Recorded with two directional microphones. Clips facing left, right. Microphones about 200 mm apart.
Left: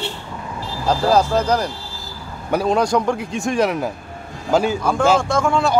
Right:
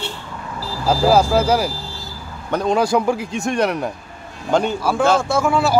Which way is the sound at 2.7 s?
5° right (ahead or behind).